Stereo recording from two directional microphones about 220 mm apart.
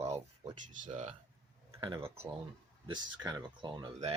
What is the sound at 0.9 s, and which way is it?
Speech, 30° right (ahead or behind).